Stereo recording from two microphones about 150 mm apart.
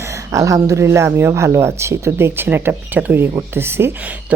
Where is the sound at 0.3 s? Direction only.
20° right (ahead or behind).